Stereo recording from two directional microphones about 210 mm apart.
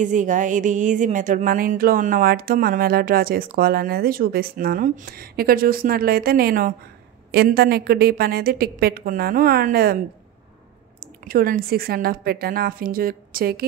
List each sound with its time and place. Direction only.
0.0 s speech: 35° right (ahead or behind)
11.2 s speech: 45° right (ahead or behind)